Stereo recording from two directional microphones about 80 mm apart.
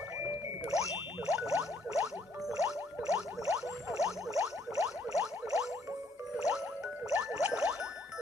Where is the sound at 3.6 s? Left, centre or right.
Centre.